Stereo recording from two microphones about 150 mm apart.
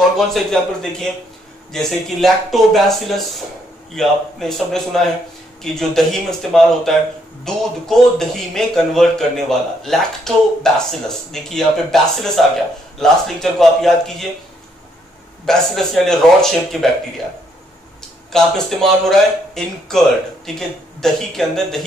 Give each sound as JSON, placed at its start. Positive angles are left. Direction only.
{"t": 0.3, "sound": "speech", "side_deg": 5}
{"t": 15.4, "sound": "speech", "side_deg": 0}
{"t": 18.3, "sound": "speech", "side_deg": 0}